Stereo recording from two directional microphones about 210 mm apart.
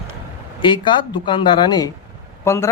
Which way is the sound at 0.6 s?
20° left (ahead or behind).